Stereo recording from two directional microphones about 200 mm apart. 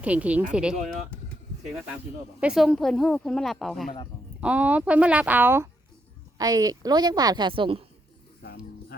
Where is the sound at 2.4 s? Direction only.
5° right (ahead or behind); by 7.8 s 25° right (ahead or behind).